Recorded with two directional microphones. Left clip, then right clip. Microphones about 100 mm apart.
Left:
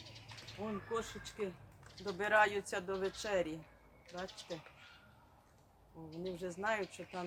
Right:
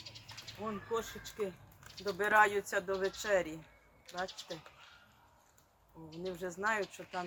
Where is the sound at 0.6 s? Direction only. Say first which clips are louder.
Right 2 dB; 55° right (ahead or behind).